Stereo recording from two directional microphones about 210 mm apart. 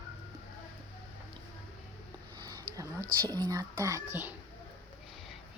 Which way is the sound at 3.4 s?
15° right (ahead or behind).